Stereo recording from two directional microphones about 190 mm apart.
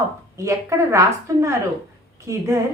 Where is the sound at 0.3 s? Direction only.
15° right (ahead or behind).